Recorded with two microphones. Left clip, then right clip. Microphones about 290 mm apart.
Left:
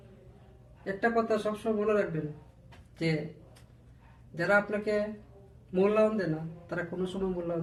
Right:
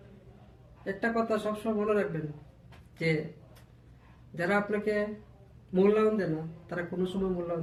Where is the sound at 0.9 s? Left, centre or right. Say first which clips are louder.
Left 2 dB; centre.